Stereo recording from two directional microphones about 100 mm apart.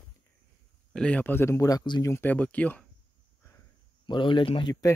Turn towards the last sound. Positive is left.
turn(degrees=50)  # may be behind; listen again after turning